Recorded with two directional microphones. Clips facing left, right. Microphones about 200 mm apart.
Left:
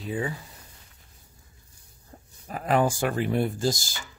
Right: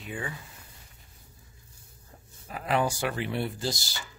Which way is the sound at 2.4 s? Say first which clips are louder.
Left 4 dB; 45° left (ahead or behind).